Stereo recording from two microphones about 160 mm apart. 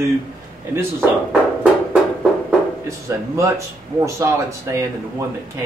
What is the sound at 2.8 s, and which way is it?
A man's voice, 20° right (ahead or behind).